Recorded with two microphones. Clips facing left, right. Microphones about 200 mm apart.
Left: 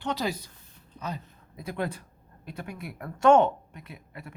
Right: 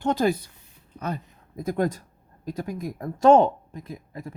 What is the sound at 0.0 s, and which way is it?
Speech, 50° right (ahead or behind).